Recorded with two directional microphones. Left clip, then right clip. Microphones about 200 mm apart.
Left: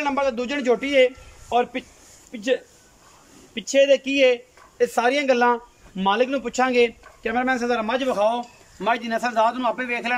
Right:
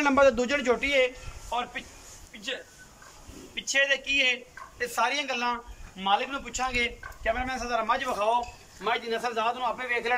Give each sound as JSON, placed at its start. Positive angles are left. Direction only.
{"t": 0.0, "sound": "a man's voice", "side_deg": 5}
{"t": 0.6, "sound": "a man's voice", "side_deg": 30}
{"t": 1.5, "sound": "speech", "side_deg": 55}